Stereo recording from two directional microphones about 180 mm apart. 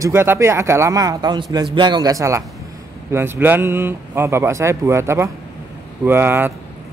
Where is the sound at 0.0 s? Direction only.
15° right (ahead or behind).